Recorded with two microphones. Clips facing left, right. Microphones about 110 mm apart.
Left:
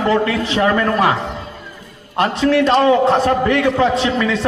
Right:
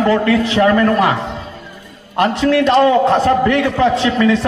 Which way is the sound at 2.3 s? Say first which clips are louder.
Right 1 dB; 20° left (ahead or behind).